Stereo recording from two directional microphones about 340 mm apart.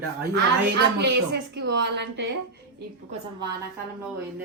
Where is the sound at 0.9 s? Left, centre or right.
Right.